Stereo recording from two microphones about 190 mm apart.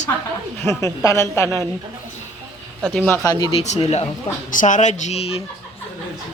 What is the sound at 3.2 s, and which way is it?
Speech, 20° left (ahead or behind).